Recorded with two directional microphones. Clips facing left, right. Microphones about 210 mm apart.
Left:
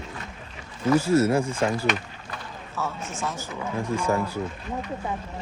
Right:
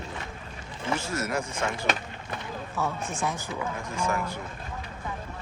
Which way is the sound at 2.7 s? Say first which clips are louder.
Even; 15° right (ahead or behind).